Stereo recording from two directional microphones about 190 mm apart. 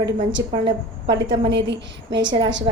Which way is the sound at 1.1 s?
65° right (ahead or behind).